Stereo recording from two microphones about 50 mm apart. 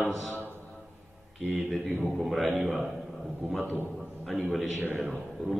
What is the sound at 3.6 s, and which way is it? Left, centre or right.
Speech, right.